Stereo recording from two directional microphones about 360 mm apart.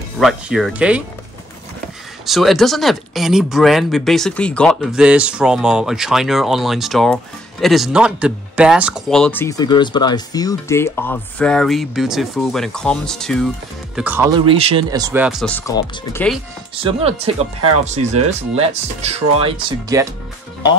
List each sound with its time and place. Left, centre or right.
0.2 s speech: centre
2.2 s speech: centre
16.7 s speech: centre